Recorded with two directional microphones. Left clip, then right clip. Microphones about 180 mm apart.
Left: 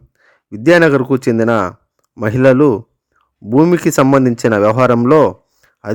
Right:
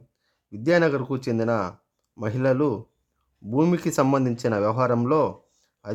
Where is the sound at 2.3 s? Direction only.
40° left (ahead or behind).